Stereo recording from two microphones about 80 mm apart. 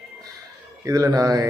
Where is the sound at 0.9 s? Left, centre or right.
Right.